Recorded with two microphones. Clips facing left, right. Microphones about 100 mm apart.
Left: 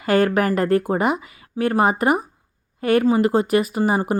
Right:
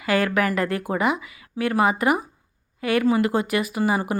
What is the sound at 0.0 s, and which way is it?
Speech, 45° left (ahead or behind).